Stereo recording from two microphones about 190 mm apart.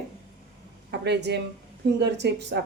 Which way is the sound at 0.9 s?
65° right (ahead or behind).